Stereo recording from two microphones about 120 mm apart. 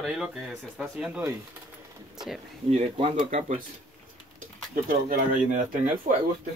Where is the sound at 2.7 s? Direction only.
55° right (ahead or behind).